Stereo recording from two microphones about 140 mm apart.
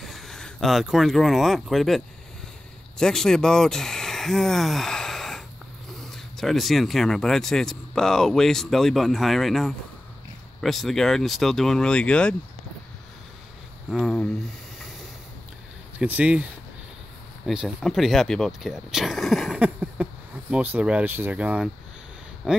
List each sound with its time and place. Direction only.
0.0 s speech: centre (ahead or behind)
13.8 s speech: 5° left (ahead or behind)
16.0 s speech: 10° right (ahead or behind)
17.5 s speech: centre (ahead or behind)
19.6 s a sound: 10° right (ahead or behind)
20.5 s speech: 10° right (ahead or behind)